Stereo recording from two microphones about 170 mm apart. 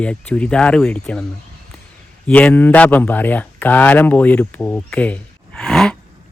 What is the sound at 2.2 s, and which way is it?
Speech, 10° left (ahead or behind).